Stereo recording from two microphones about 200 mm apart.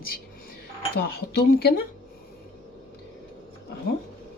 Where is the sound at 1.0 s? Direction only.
50° left (ahead or behind).